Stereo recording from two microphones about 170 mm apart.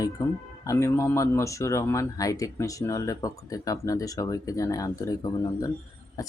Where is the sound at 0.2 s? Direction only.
20° left (ahead or behind).